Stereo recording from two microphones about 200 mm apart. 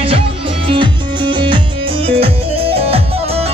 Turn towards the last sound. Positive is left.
turn(degrees=-30)  # may be behind; listen again after turning